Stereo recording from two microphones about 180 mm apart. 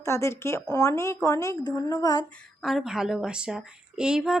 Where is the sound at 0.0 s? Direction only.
15° left (ahead or behind).